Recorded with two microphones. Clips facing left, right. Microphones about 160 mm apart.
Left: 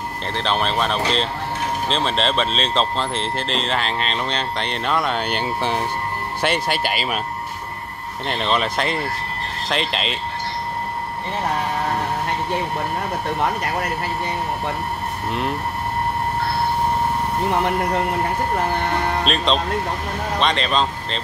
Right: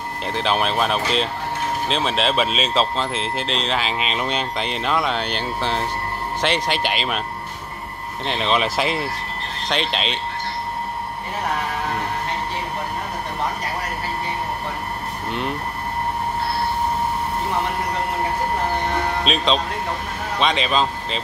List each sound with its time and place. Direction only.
0.3 s speech: 5° right (ahead or behind)
5.4 s speech: 15° left (ahead or behind)
8.3 s speech: centre (ahead or behind)
19.2 s speech: centre (ahead or behind)